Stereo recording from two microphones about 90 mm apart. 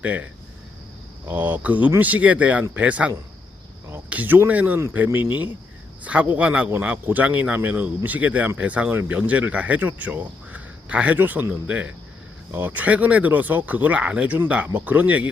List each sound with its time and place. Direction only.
0.0 s speech: 15° right (ahead or behind)
1.3 s speech: 20° right (ahead or behind)
4.1 s speech: 20° right (ahead or behind)